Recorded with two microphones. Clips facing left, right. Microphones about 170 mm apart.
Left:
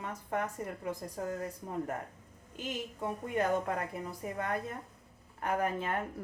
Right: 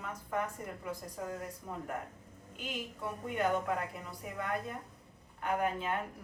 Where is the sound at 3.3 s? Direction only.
40° left (ahead or behind).